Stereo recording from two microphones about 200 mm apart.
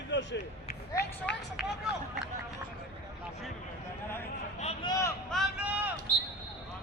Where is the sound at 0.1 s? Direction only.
65° left (ahead or behind).